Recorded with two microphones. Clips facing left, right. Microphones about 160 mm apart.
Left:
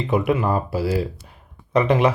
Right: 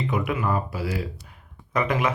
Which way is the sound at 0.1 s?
30° left (ahead or behind).